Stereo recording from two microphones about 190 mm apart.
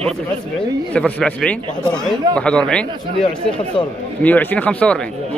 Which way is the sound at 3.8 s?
30° left (ahead or behind).